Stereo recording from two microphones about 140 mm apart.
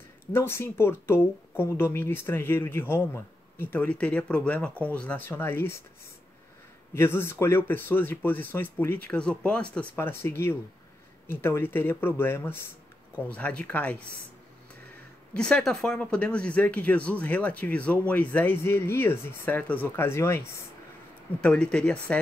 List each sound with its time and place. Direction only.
0.3 s speech: 15° left (ahead or behind)
6.9 s speech: 15° left (ahead or behind)
15.3 s speech: 5° left (ahead or behind)